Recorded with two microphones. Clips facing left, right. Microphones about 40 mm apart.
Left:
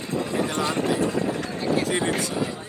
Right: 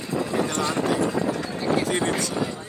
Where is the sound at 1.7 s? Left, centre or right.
Right.